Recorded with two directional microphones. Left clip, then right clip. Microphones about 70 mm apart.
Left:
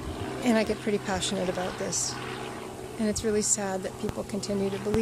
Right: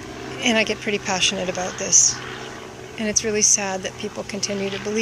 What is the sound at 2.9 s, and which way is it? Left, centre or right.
Speech, left.